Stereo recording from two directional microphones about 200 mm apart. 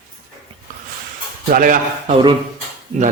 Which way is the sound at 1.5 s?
45° right (ahead or behind).